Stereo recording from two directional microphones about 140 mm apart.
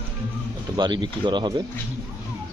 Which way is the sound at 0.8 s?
30° right (ahead or behind).